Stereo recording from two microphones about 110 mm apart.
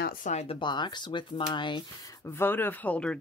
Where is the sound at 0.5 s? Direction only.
45° left (ahead or behind).